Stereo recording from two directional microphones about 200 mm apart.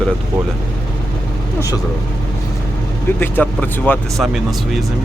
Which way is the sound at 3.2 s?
10° left (ahead or behind).